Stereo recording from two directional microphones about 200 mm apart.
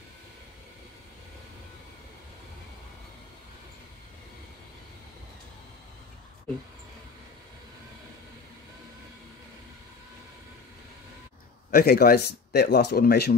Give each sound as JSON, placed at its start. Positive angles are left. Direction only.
{"t": 11.7, "sound": "speech", "side_deg": 50}